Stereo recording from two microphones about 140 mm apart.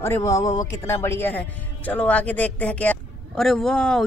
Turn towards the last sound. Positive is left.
turn(degrees=5)  # may be behind; listen again after turning